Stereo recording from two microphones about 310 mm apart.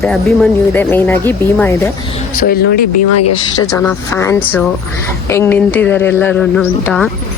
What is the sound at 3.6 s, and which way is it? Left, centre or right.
Speech, centre.